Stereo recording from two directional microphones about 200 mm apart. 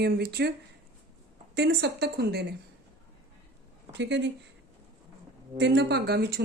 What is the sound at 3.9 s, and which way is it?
Speech, 60° right (ahead or behind).